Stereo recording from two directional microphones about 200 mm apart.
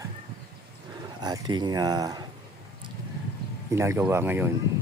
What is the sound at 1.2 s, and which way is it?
Speech, 20° right (ahead or behind).